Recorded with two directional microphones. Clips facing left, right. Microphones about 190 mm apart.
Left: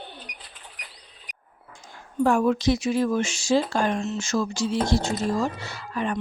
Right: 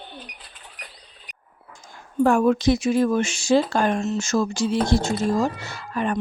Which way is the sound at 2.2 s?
50° right (ahead or behind).